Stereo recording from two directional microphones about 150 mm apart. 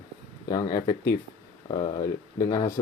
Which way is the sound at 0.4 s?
25° left (ahead or behind).